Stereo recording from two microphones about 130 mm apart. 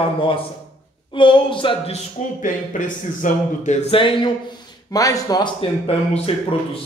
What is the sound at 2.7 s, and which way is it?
Speech, 90° left.